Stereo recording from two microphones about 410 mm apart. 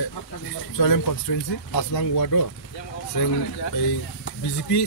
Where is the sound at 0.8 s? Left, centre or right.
Left.